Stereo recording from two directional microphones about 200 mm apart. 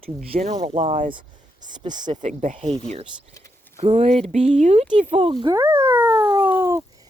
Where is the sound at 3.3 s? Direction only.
15° left (ahead or behind).